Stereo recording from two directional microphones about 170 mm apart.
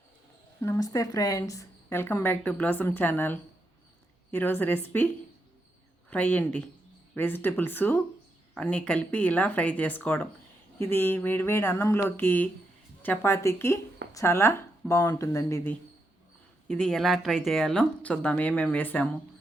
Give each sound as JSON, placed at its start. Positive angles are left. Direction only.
{"t": 0.6, "sound": "a woman's voice", "side_deg": 20}
{"t": 6.1, "sound": "a woman's voice", "side_deg": 10}
{"t": 16.6, "sound": "speech", "side_deg": 5}